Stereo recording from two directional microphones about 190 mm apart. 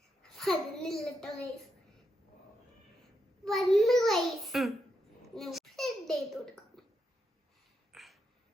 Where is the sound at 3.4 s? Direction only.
Centre (ahead or behind).